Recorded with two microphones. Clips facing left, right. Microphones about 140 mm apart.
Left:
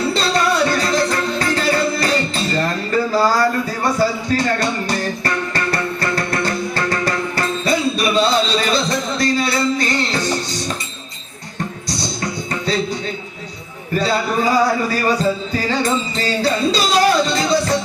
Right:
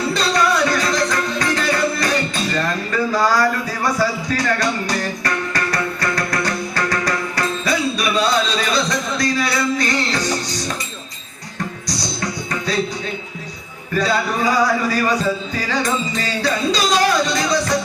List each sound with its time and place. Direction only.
0.1 s music: 30° left (ahead or behind)
12.2 s music: 25° left (ahead or behind)
13.9 s speech: 30° left (ahead or behind)